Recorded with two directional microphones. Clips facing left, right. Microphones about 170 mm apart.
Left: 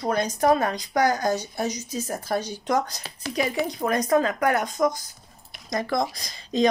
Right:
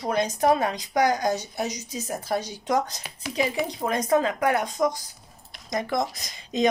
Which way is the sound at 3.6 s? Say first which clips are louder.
Left 1 dB; 25° right (ahead or behind).